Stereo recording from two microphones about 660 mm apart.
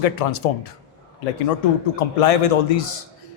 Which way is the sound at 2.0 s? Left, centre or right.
Left.